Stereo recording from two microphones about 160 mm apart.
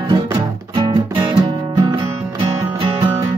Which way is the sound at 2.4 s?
30° right (ahead or behind).